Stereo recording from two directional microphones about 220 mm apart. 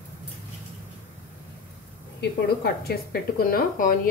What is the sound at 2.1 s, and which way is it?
A woman's voice, 45° left (ahead or behind).